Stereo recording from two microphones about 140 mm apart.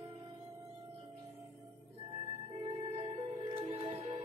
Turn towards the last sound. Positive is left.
turn(degrees=-45)  # may be behind; listen again after turning